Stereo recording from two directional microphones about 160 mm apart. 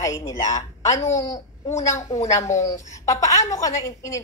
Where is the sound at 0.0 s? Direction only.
20° left (ahead or behind).